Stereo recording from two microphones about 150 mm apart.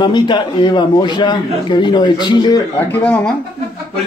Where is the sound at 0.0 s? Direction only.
30° left (ahead or behind).